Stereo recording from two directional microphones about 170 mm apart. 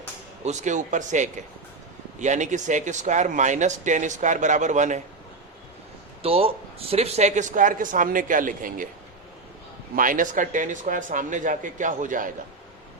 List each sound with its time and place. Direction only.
0.4 s speech: 45° right (ahead or behind)
6.2 s speech: 35° right (ahead or behind); by 8.9 s 55° right (ahead or behind)
9.9 s speech: 50° right (ahead or behind)